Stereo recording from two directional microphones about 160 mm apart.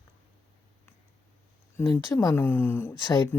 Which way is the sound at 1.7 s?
15° left (ahead or behind).